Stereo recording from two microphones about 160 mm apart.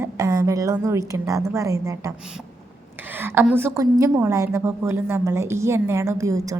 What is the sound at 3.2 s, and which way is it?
A woman's voice, 15° right (ahead or behind).